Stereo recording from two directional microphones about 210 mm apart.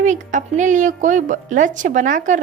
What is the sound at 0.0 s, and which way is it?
Speech, 35° right (ahead or behind).